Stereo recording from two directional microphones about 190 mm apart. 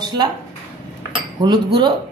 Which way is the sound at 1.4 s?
20° right (ahead or behind).